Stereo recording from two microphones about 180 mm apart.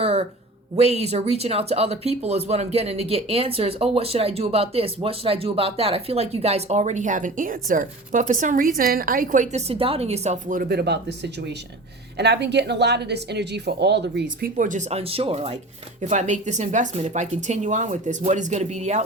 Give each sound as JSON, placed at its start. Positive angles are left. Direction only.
{"t": 0.0, "sound": "a sound", "side_deg": -35}
{"t": 0.8, "sound": "speech", "side_deg": -35}
{"t": 10.5, "sound": "speech", "side_deg": -55}
{"t": 14.5, "sound": "speech", "side_deg": -45}